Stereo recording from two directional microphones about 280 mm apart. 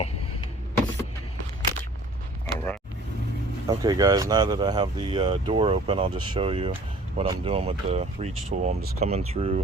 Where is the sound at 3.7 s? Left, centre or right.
Centre.